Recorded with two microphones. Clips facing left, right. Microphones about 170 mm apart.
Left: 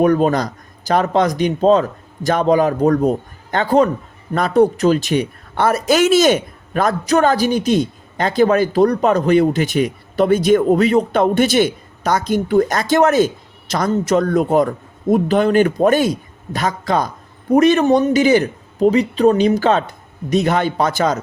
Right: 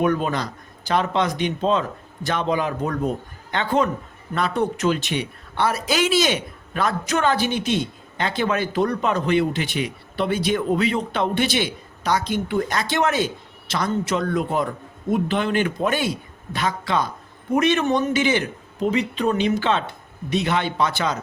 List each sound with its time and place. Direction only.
0.0 s speech: 40° left (ahead or behind)